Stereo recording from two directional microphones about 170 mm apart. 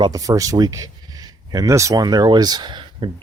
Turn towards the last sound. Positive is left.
turn(degrees=-25)  # may be behind; listen again after turning